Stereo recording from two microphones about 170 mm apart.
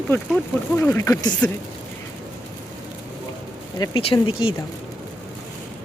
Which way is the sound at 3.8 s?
30° left (ahead or behind).